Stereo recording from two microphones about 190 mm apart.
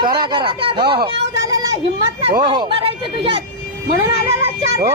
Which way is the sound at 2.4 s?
25° right (ahead or behind).